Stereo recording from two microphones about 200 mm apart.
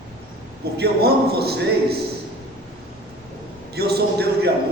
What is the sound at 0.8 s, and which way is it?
Speech, 55° right (ahead or behind).